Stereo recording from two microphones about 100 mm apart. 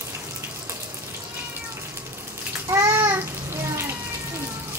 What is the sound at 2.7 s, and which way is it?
Babbling, 30° right (ahead or behind).